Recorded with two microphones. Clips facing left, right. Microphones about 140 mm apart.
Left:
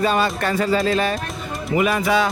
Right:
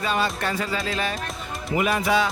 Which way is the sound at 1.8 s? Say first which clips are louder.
Left 3 dB; 90° left.